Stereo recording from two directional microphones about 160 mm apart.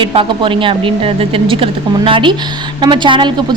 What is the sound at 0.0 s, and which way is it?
A woman's voice, 35° right (ahead or behind).